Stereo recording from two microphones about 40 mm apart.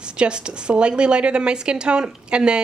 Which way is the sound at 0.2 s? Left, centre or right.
Right.